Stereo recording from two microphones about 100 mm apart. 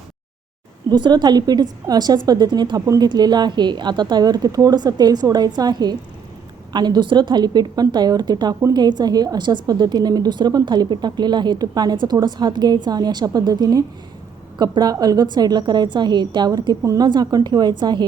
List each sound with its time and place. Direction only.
0.9 s a woman's voice: 45° right (ahead or behind)